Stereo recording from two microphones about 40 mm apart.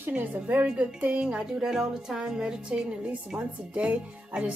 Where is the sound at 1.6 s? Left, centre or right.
Centre; by 4.5 s right.